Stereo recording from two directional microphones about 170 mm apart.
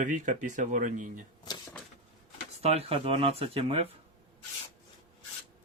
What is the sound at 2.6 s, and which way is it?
Speech, 35° right (ahead or behind).